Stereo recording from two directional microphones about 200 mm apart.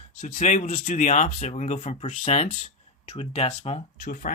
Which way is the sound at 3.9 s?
45° left (ahead or behind).